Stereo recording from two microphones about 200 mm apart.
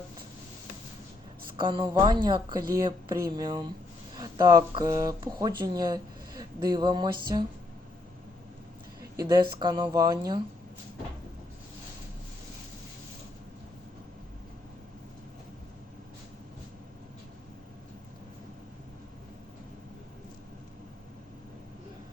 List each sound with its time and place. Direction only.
1.5 s a woman's voice: 25° right (ahead or behind)
9.1 s a woman's voice: 20° right (ahead or behind)